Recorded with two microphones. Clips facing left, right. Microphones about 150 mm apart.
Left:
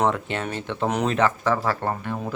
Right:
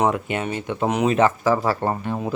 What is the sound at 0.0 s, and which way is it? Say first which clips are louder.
Speech: right 2 dB; 10° right (ahead or behind).